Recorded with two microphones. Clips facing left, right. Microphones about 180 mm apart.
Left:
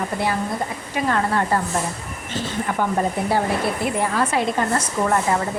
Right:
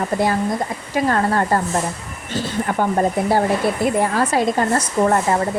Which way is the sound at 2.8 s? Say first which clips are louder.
Right 3 dB; 50° right (ahead or behind).